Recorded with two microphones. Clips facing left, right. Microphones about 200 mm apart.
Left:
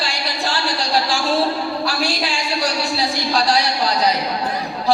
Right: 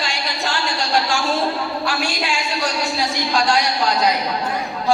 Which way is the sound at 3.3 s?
35° left (ahead or behind).